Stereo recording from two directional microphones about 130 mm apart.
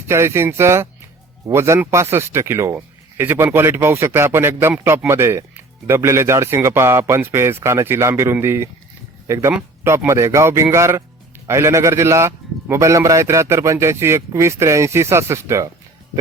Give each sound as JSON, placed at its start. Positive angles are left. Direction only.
{"t": 0.1, "sound": "speech", "side_deg": -20}